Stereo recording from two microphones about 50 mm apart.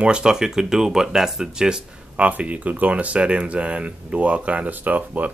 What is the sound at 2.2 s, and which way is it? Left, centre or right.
Speech, right.